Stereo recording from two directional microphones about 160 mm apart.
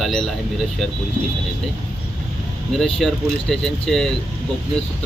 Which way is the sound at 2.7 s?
Centre (ahead or behind).